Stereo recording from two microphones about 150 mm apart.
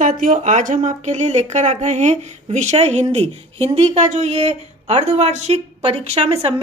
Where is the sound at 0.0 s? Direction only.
60° right (ahead or behind).